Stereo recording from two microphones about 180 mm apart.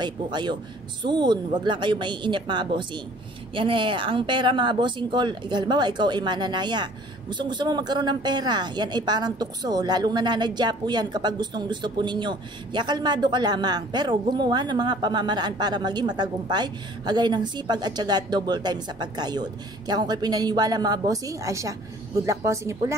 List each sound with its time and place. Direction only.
0.0 s speech: 25° right (ahead or behind)